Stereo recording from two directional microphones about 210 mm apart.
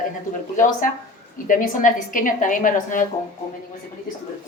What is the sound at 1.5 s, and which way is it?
A woman's voice, 40° left (ahead or behind).